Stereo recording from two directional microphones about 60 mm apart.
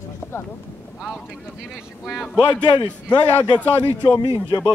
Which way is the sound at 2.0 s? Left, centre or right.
Centre.